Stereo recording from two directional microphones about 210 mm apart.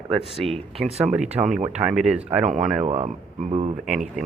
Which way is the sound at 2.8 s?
35° right (ahead or behind).